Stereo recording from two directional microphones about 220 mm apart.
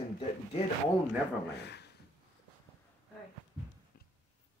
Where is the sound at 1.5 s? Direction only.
50° left (ahead or behind).